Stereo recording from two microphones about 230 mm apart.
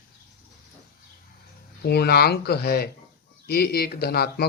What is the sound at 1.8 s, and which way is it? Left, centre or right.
Speech, left.